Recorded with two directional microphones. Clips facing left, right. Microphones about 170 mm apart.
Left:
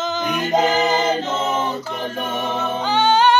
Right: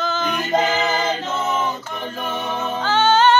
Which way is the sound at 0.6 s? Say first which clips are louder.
Left 3 dB; 35° left (ahead or behind).